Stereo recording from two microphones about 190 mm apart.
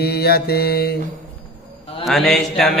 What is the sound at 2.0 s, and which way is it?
Mantra, centre (ahead or behind).